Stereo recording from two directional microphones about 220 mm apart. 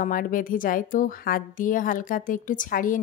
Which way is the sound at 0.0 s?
40° left (ahead or behind).